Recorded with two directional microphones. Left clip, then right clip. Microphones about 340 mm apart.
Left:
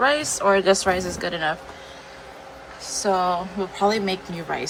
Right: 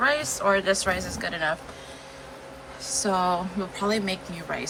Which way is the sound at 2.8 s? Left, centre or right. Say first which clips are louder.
Left 3 dB; centre.